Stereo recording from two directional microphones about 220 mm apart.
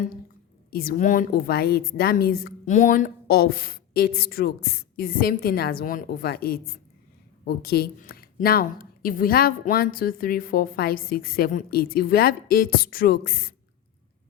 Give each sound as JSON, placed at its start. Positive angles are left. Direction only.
{"t": 0.7, "sound": "speech", "side_deg": 45}